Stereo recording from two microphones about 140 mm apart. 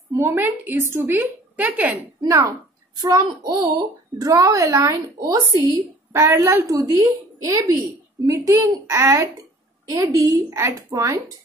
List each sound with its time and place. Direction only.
0.1 s a woman's voice: 15° right (ahead or behind)
2.2 s a woman's voice: 25° right (ahead or behind)